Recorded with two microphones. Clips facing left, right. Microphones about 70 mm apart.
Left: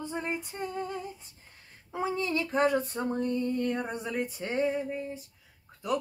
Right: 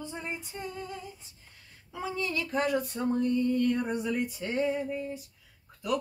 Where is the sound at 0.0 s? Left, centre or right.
Left.